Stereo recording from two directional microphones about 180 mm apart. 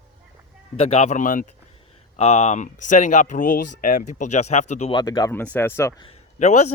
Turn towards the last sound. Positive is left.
turn(degrees=40)  # may be behind; listen again after turning